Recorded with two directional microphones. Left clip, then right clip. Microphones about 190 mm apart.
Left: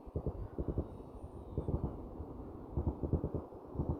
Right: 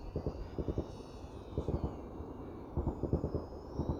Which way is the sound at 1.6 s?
Centre (ahead or behind).